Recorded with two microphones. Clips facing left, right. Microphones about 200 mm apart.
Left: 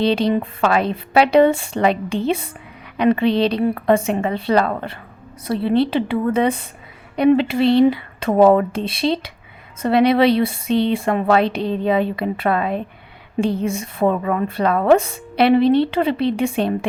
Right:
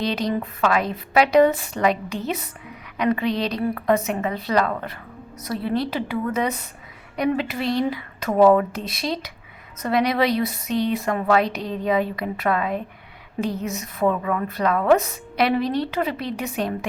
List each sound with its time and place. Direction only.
0.0 s a woman's voice: 30° left (ahead or behind)